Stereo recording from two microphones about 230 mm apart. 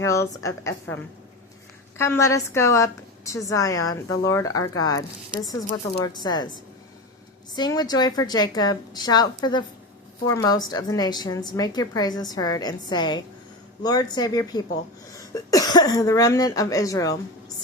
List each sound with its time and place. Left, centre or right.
0.0 s a woman's voice: centre
2.0 s a woman's voice: centre
7.5 s a woman's voice: centre